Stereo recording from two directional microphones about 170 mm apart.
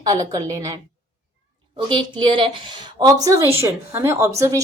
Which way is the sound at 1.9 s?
30° right (ahead or behind).